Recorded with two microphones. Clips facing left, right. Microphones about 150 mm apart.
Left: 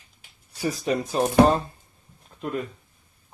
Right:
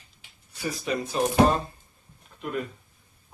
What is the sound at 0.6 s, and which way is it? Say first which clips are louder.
Speech: left 4 dB; 35° left (ahead or behind).